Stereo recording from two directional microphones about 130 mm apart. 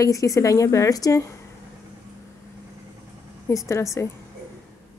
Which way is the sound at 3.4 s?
20° left (ahead or behind).